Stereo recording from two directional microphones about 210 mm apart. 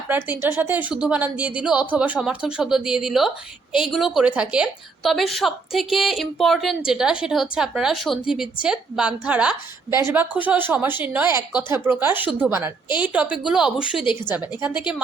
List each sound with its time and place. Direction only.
0.1 s a woman's voice: 10° right (ahead or behind)